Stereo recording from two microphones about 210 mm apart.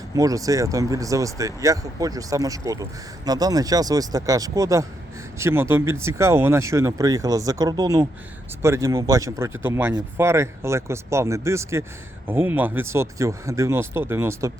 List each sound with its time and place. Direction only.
0.2 s speech: 15° right (ahead or behind)